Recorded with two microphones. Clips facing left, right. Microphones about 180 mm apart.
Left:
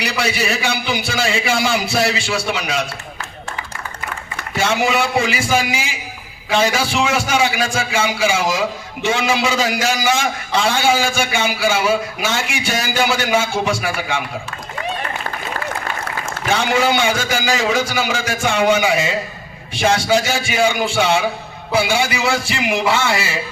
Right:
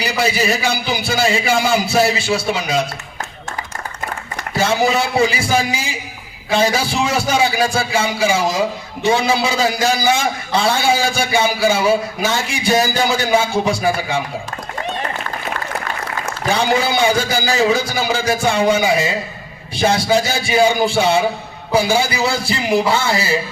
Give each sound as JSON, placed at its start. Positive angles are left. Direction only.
{"t": 0.0, "sound": "a man's voice", "side_deg": -35}
{"t": 4.5, "sound": "a man's voice", "side_deg": -35}
{"t": 16.4, "sound": "a man's voice", "side_deg": -35}